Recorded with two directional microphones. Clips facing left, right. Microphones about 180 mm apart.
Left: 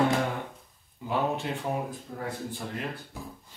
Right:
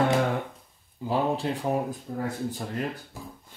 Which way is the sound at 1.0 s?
30° right (ahead or behind).